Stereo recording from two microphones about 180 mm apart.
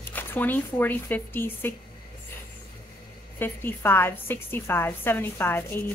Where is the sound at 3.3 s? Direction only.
10° left (ahead or behind).